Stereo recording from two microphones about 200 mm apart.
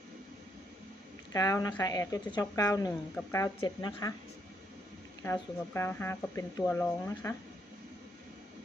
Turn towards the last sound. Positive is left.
turn(degrees=10)  # may be behind; listen again after turning